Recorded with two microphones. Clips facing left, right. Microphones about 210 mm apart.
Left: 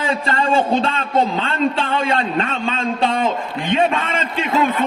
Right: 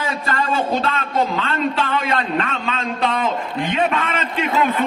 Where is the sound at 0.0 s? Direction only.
25° left (ahead or behind).